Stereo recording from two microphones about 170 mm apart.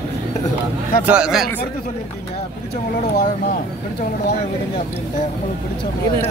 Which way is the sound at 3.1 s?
55° left (ahead or behind).